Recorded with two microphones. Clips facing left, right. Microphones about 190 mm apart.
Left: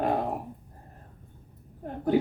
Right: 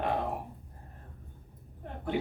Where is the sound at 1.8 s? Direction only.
40° left (ahead or behind).